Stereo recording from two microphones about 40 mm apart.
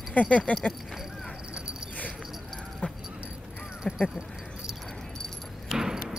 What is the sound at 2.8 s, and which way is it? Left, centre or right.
Dog, left.